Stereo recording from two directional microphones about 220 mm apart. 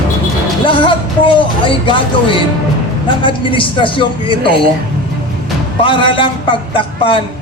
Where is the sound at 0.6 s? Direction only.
25° left (ahead or behind).